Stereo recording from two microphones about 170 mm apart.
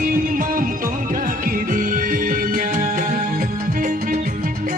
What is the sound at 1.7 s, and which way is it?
Music, 55° right (ahead or behind).